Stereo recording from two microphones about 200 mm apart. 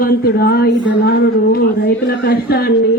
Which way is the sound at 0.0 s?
50° left (ahead or behind).